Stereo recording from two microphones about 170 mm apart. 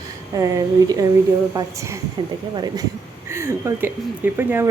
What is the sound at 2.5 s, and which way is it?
Speech, 25° right (ahead or behind).